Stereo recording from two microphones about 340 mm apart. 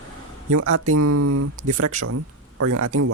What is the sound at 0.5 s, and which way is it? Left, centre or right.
Speech, right.